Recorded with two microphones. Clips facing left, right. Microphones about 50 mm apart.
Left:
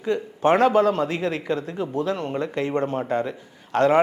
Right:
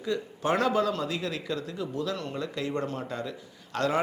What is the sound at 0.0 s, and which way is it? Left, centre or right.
A man's voice, left.